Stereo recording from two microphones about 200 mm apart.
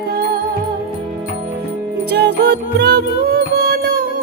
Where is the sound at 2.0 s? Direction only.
55° right (ahead or behind).